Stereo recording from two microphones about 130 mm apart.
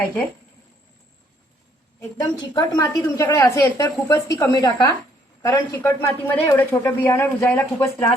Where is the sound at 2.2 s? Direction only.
25° left (ahead or behind).